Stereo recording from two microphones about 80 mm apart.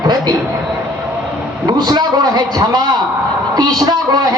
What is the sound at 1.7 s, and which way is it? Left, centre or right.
A man's voice, right.